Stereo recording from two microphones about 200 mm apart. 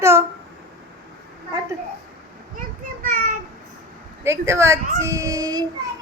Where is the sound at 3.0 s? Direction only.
40° right (ahead or behind).